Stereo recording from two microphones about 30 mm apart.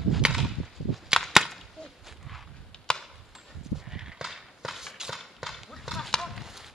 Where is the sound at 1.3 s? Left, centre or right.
Centre.